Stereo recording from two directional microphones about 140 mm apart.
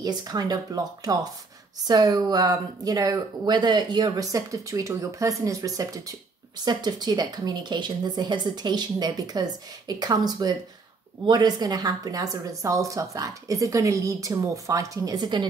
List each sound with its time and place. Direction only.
0.0 s speech: 30° right (ahead or behind)